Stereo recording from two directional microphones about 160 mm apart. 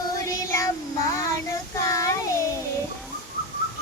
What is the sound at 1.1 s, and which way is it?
Child singing, 20° left (ahead or behind).